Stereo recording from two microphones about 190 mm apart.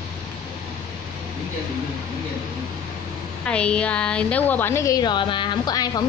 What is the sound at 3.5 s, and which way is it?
A woman's voice, 5° left (ahead or behind).